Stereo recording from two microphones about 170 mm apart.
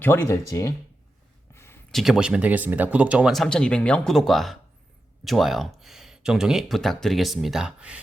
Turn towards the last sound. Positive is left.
turn(degrees=-5)  # may be behind; listen again after turning